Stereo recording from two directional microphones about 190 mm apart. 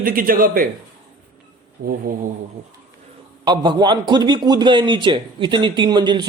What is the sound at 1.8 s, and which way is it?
Speech, 50° right (ahead or behind).